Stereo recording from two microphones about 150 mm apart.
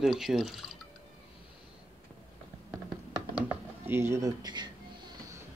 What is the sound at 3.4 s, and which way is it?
Speech, 15° right (ahead or behind).